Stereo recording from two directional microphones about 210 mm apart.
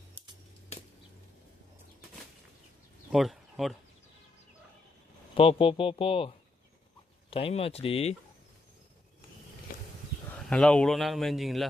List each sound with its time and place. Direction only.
3.1 s speech: centre (ahead or behind)
5.3 s speech: 25° left (ahead or behind)
10.3 s a man's voice: 5° left (ahead or behind)